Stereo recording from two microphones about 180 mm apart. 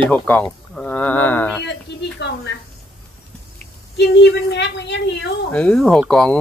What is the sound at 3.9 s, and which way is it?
A woman's voice, 70° left (ahead or behind).